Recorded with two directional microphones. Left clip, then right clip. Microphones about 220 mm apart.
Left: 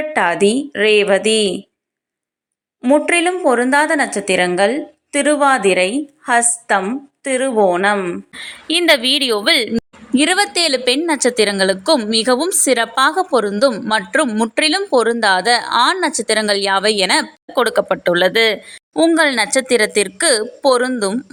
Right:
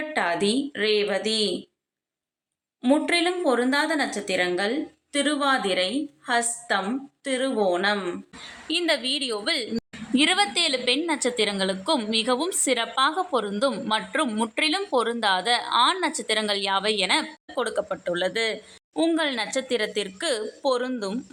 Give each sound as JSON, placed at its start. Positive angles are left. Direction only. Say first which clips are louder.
{"t": 0.1, "sound": "a woman's voice", "louder": "left 9 dB", "side_deg": 30}
{"t": 3.1, "sound": "a woman's voice", "louder": "left 8 dB", "side_deg": 25}
{"t": 9.7, "sound": "a woman's voice", "louder": "left 7 dB", "side_deg": 25}